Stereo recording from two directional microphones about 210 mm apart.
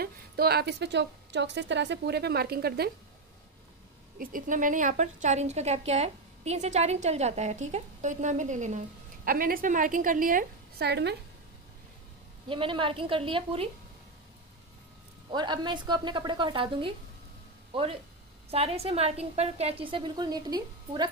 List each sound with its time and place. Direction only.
0.0 s a woman's voice: 45° right (ahead or behind)
4.2 s a woman's voice: 40° right (ahead or behind)
12.4 s a woman's voice: 25° right (ahead or behind)
15.3 s a woman's voice: 20° right (ahead or behind)
18.5 s a woman's voice: 30° right (ahead or behind)